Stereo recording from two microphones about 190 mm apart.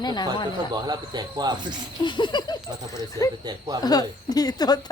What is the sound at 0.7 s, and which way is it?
Speech, 20° right (ahead or behind).